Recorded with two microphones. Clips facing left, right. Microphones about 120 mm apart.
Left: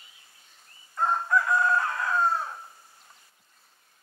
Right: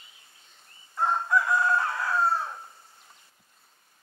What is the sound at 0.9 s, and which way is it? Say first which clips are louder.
Chicken: even; 5° right (ahead or behind).